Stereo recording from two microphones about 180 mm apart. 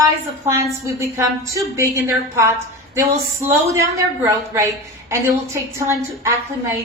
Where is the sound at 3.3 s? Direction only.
15° right (ahead or behind).